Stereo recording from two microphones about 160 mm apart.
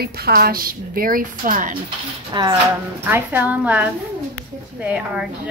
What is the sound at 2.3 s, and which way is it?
Speech, 30° right (ahead or behind).